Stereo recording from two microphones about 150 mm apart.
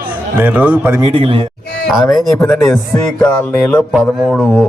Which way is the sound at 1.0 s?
35° right (ahead or behind).